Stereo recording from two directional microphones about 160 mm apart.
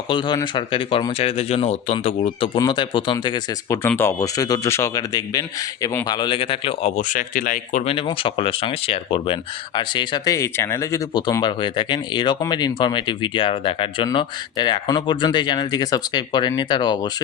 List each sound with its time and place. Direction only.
0.1 s speech: 30° left (ahead or behind)
3.8 s speech: 15° left (ahead or behind); by 7.9 s 50° left (ahead or behind)
7.9 s speech: 35° left (ahead or behind)